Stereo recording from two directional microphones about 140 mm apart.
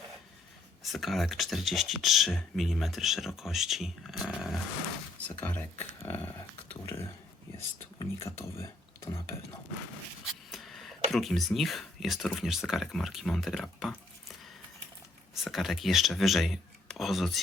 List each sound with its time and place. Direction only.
0.8 s speech: centre (ahead or behind)
5.4 s speech: 10° left (ahead or behind)
10.5 s a sound: centre (ahead or behind)
11.1 s speech: centre (ahead or behind)
15.4 s speech: centre (ahead or behind)